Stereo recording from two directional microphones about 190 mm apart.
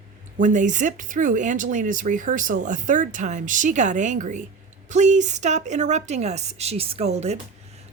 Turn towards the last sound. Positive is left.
turn(degrees=-35)  # may be behind; listen again after turning